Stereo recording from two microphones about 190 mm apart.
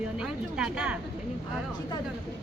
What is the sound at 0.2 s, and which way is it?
Speech, 5° right (ahead or behind).